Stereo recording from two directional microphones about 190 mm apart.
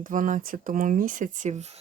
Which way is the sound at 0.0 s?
45° right (ahead or behind).